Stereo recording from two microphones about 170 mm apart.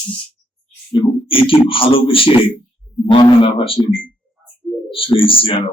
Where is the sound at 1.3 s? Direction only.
30° left (ahead or behind).